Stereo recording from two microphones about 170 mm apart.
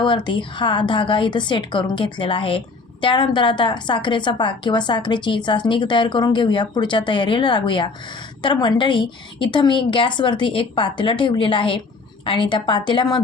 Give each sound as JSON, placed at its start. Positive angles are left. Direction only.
{"t": 0.0, "sound": "a woman's voice", "side_deg": 30}